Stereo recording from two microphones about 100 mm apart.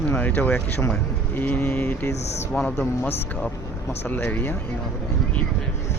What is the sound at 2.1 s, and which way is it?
Speech, 90° left.